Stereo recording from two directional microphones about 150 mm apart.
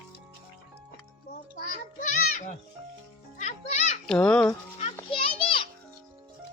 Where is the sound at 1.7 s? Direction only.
60° left (ahead or behind).